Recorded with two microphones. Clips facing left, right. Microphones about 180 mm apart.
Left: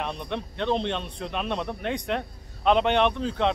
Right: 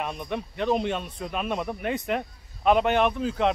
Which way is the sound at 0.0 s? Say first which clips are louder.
Even; 5° right (ahead or behind).